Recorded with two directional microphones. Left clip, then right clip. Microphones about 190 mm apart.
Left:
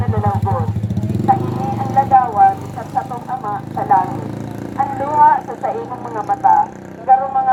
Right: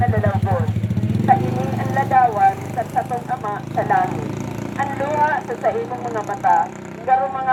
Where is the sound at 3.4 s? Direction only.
35° left (ahead or behind).